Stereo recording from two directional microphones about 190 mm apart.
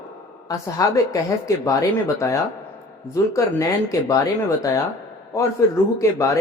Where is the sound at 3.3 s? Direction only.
15° left (ahead or behind).